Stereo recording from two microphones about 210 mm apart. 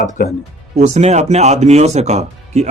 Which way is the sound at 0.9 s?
30° right (ahead or behind).